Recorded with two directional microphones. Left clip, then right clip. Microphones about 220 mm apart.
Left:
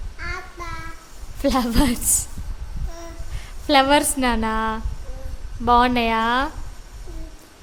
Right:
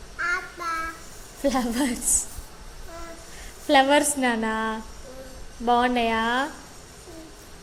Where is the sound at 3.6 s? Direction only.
15° left (ahead or behind).